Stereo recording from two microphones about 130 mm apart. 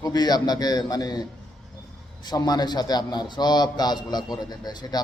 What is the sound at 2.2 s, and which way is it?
A man's voice, 30° left (ahead or behind).